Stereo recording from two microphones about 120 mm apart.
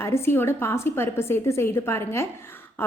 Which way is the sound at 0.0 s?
20° left (ahead or behind).